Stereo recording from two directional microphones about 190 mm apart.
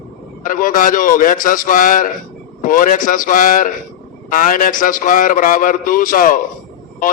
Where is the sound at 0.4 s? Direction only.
45° left (ahead or behind).